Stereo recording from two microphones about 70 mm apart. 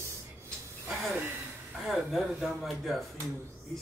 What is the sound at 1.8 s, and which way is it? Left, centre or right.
Speech, centre.